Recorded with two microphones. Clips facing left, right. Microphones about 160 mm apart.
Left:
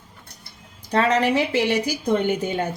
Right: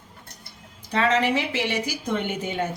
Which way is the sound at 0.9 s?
40° left (ahead or behind).